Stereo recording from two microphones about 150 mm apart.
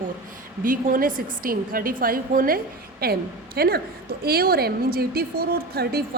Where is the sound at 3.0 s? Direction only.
90° right.